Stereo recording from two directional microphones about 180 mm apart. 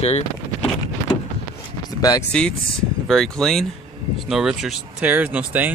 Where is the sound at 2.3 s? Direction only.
5° left (ahead or behind).